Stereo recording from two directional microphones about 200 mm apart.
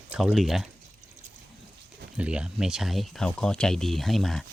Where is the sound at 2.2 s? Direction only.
5° right (ahead or behind).